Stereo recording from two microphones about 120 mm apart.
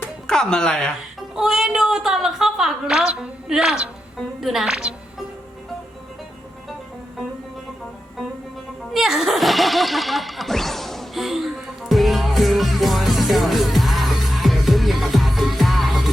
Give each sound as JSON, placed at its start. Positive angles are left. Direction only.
{"t": 0.3, "sound": "speech", "side_deg": 5}
{"t": 1.4, "sound": "a woman's voice", "side_deg": -5}
{"t": 8.9, "sound": "music", "side_deg": 0}